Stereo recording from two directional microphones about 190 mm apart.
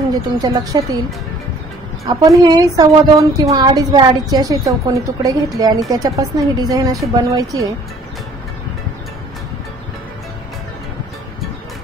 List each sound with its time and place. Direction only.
0.1 s a woman's voice: 20° right (ahead or behind)
2.0 s a woman's voice: 20° right (ahead or behind)